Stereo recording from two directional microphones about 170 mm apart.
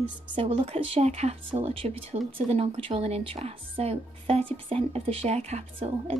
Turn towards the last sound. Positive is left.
turn(degrees=-35)  # may be behind; listen again after turning